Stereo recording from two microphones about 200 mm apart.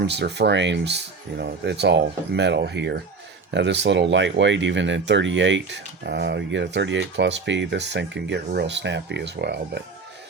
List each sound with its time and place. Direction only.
0.0 s speech: 60° right (ahead or behind)